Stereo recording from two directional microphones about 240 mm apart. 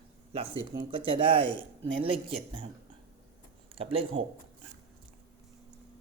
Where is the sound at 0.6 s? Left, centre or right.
Right.